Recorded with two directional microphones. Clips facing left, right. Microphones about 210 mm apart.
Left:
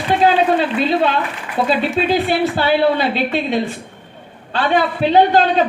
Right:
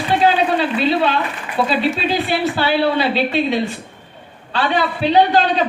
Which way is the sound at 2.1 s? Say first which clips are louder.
Left 3 dB; 50° left (ahead or behind).